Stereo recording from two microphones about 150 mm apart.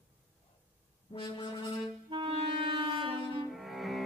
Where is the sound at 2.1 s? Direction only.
35° right (ahead or behind).